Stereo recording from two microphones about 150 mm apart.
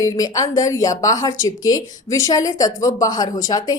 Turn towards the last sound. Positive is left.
turn(degrees=25)  # may be behind; listen again after turning